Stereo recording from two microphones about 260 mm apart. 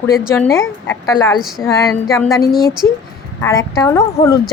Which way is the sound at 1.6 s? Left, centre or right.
Centre.